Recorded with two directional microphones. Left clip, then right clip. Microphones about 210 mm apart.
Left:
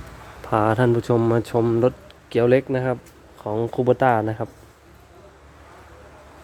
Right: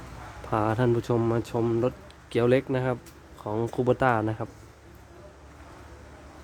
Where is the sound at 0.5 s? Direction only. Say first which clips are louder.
Left 6 dB; 15° left (ahead or behind).